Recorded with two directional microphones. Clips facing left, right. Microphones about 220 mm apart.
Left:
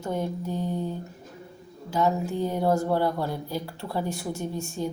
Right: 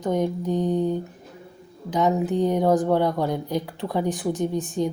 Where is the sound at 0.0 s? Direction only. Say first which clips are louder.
Right 6 dB; 15° right (ahead or behind).